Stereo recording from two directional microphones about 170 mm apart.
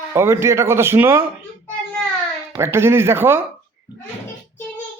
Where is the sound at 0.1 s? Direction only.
15° right (ahead or behind).